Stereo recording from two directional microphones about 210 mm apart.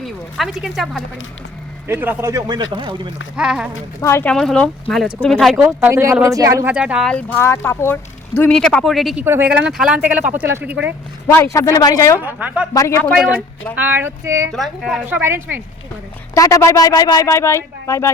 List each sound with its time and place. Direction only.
0.0 s speech: centre (ahead or behind); by 3.1 s 20° right (ahead or behind)
3.3 s speech: 5° right (ahead or behind)
4.0 s speech: 10° left (ahead or behind)
9.2 s speech: 10° right (ahead or behind)
11.3 s speech: 15° left (ahead or behind)
12.2 s speech: 10° right (ahead or behind)
12.7 s speech: 15° left (ahead or behind)
13.7 s speech: 10° right (ahead or behind)
14.5 s speech: centre (ahead or behind)
16.3 s speech: 15° left (ahead or behind)